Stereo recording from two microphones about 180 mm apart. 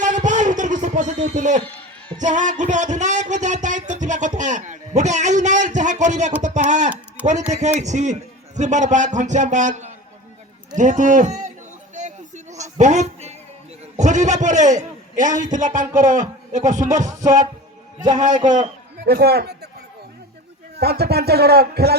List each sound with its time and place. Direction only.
0.0 s music: 45° right (ahead or behind)
2.1 s a sound: 45° right (ahead or behind)
4.4 s a man's voice: 45° right (ahead or behind)
10.8 s a sound: 45° right (ahead or behind)
13.9 s a man's voice: 40° right (ahead or behind)
15.5 s a sound: 45° right (ahead or behind)
18.3 s a man's voice: 25° right (ahead or behind)
19.0 s speech: 60° right (ahead or behind)
20.7 s speech: 60° right (ahead or behind)